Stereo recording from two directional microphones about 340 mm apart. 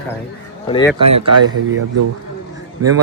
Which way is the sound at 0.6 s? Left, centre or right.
Centre.